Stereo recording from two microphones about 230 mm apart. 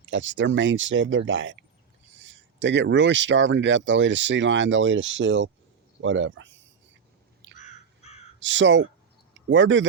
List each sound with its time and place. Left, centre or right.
0.1 s speech: right
7.5 s crow: left
8.4 s speech: right